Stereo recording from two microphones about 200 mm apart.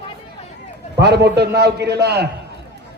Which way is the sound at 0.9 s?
55° right (ahead or behind).